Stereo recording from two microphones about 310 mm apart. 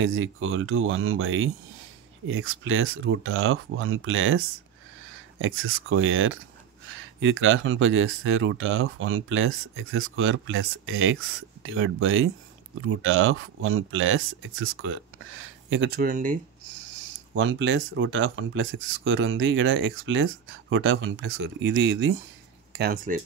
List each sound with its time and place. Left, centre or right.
0.0 s speech: right
17.4 s speech: right